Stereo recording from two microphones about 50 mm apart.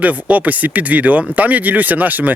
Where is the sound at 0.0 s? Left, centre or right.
Right.